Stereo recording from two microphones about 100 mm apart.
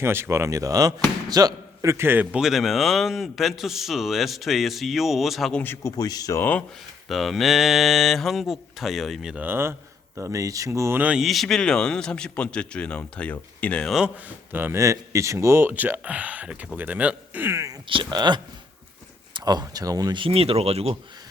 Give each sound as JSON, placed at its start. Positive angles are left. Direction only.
{"t": 0.0, "sound": "a man's voice", "side_deg": -25}
{"t": 2.3, "sound": "speech", "side_deg": -5}
{"t": 5.5, "sound": "speech", "side_deg": 20}
{"t": 5.8, "sound": "speech", "side_deg": 40}
{"t": 6.4, "sound": "speech", "side_deg": 15}
{"t": 7.1, "sound": "speech", "side_deg": 0}
{"t": 9.4, "sound": "speech", "side_deg": -20}
{"t": 11.0, "sound": "speech", "side_deg": -10}
{"t": 11.3, "sound": "speech", "side_deg": 0}
{"t": 13.8, "sound": "speech", "side_deg": -5}
{"t": 14.5, "sound": "speech", "side_deg": -25}
{"t": 17.8, "sound": "speech", "side_deg": -55}
{"t": 20.1, "sound": "speech", "side_deg": -70}